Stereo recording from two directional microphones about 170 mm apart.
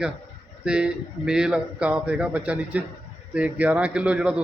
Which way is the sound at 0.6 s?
5° right (ahead or behind).